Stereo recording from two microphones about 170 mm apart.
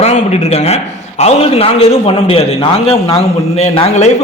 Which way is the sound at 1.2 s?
35° left (ahead or behind).